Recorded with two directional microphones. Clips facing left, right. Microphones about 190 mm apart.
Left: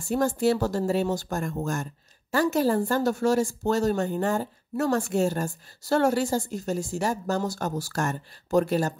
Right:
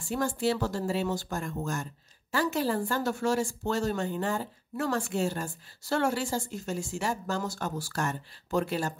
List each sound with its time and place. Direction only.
0.1 s a woman's voice: 45° left (ahead or behind)